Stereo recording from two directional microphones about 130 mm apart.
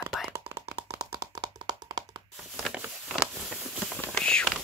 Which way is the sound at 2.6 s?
5° right (ahead or behind).